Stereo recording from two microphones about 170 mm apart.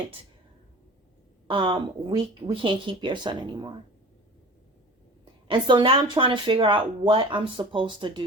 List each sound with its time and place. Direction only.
1.5 s speech: 30° right (ahead or behind)
5.5 s speech: 30° right (ahead or behind)